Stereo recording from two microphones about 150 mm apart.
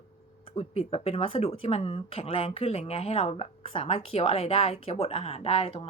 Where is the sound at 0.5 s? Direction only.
40° left (ahead or behind).